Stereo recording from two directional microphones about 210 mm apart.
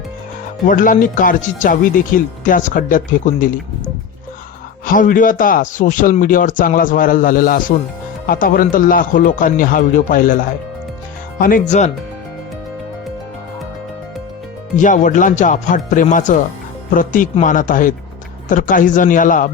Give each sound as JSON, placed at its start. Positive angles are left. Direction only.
{"t": 0.7, "sound": "speech", "side_deg": 40}
{"t": 4.9, "sound": "speech", "side_deg": 40}
{"t": 11.3, "sound": "speech", "side_deg": 40}
{"t": 14.8, "sound": "speech", "side_deg": 35}